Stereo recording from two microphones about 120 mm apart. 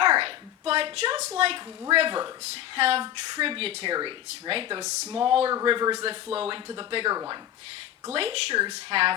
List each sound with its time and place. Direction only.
0.0 s a sound: 50° right (ahead or behind)
1.9 s speech: 45° right (ahead or behind)
2.4 s speech: 55° right (ahead or behind)
3.9 s speech: 45° right (ahead or behind)
5.6 s a man's voice: 40° right (ahead or behind)
6.3 s speech: 50° right (ahead or behind)
8.1 s speech: 50° right (ahead or behind)